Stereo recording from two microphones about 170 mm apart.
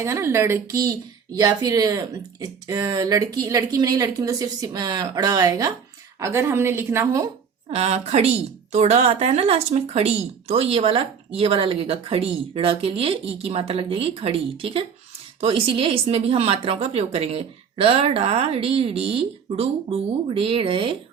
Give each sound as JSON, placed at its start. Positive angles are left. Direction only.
{"t": 0.0, "sound": "a woman's voice", "side_deg": -15}
{"t": 7.7, "sound": "speech", "side_deg": -40}